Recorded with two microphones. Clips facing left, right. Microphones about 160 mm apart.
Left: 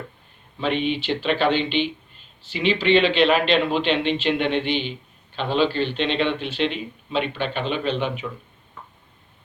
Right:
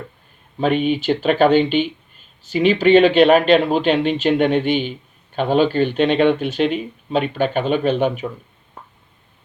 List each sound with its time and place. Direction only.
0.6 s a man's voice: 45° right (ahead or behind)